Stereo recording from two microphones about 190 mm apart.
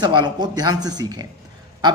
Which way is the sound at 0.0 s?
25° right (ahead or behind).